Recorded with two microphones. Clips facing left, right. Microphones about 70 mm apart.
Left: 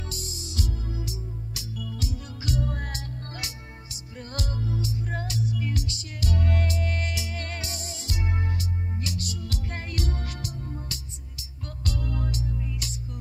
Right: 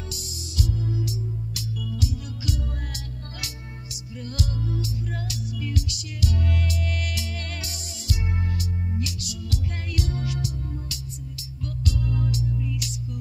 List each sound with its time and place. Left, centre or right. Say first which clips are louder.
0.1 s music: even; left